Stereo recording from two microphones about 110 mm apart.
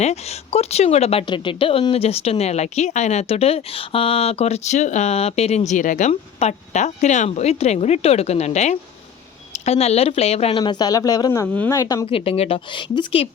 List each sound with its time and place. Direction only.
0.0 s speech: 80° left
1.3 s speech: 50° left (ahead or behind); by 8.8 s 90° left
9.5 s speech: 75° left (ahead or behind)
10.6 s speech: 40° left (ahead or behind)
12.0 s speech: 60° left (ahead or behind)